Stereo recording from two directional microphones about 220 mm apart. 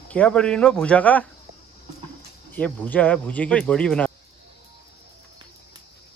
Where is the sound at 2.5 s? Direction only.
5° left (ahead or behind).